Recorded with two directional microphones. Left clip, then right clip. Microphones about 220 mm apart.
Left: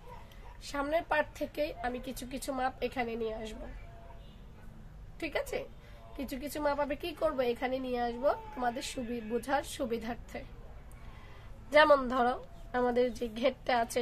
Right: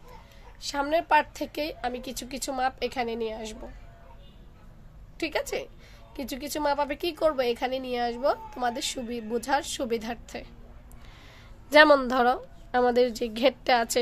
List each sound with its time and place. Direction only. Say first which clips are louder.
0.6 s a woman's voice: right 6 dB; 45° right (ahead or behind)
5.1 s a woman's voice: right 6 dB; 45° right (ahead or behind)
11.7 s a woman's voice: right 6 dB; 40° right (ahead or behind)